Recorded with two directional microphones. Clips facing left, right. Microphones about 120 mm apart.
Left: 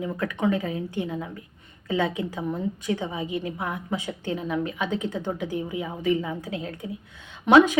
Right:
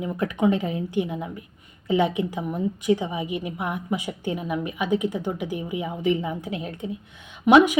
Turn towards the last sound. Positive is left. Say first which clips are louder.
# right 1 dB
turn(degrees=-15)  # may be behind; listen again after turning